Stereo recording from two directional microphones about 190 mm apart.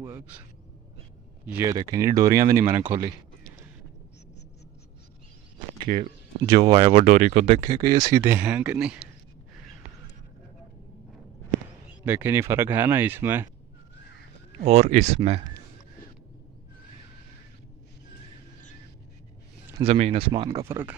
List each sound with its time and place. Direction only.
1.4 s speech: 10° right (ahead or behind)
5.9 s speech: 45° right (ahead or behind)
6.4 s speech: 25° right (ahead or behind)
7.0 s speech: 40° right (ahead or behind)
7.6 s speech: 20° right (ahead or behind)
12.0 s speech: 10° right (ahead or behind)
14.6 s speech: 35° right (ahead or behind)
19.8 s speech: 35° right (ahead or behind); by 20.9 s 15° right (ahead or behind)